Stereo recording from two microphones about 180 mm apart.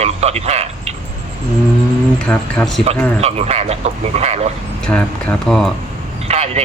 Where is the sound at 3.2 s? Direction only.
35° right (ahead or behind).